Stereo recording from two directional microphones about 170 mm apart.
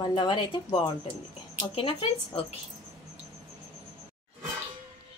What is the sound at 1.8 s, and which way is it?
Speech, 30° left (ahead or behind).